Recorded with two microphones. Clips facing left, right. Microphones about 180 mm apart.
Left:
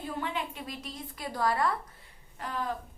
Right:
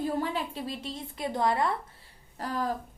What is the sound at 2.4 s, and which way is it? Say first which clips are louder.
Speech: right 4 dB; 35° right (ahead or behind).